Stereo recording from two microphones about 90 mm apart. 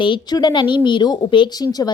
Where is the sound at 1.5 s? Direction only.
45° left (ahead or behind).